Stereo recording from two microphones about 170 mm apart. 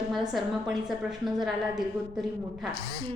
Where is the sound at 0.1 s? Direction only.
Centre (ahead or behind).